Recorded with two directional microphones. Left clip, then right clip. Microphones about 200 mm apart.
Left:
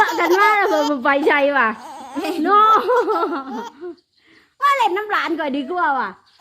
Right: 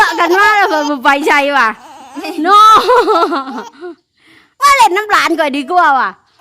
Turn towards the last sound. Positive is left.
turn(degrees=-40)  # may be behind; listen again after turning